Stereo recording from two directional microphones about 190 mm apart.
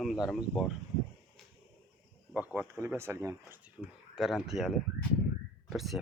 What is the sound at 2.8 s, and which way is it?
Speech, 15° right (ahead or behind).